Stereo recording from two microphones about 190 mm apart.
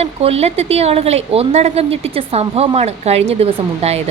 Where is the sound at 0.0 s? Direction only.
35° right (ahead or behind).